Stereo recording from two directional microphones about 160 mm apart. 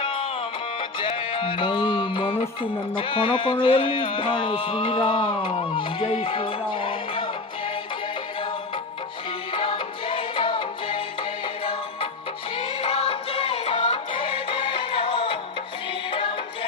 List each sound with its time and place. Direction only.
0.0 s music: 35° left (ahead or behind)
9.5 s music: 30° left (ahead or behind)